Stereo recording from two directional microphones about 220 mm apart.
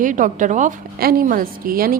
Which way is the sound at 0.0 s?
35° right (ahead or behind).